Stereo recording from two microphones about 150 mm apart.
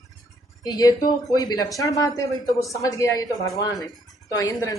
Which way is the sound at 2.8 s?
20° left (ahead or behind).